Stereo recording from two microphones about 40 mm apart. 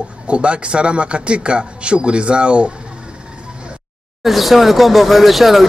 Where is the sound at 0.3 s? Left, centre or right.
Right.